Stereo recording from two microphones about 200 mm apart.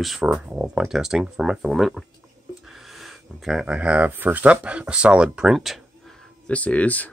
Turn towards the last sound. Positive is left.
turn(degrees=5)  # may be behind; listen again after turning